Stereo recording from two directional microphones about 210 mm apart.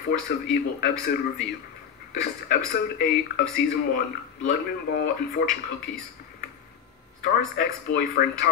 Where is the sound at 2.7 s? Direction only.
45° left (ahead or behind).